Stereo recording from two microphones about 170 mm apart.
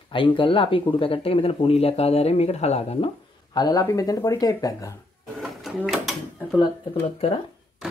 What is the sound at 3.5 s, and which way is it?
Speech, 20° left (ahead or behind).